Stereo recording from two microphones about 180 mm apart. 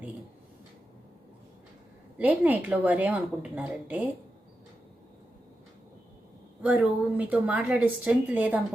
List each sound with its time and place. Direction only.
2.1 s a woman's voice: 5° right (ahead or behind)
6.6 s a woman's voice: 5° right (ahead or behind)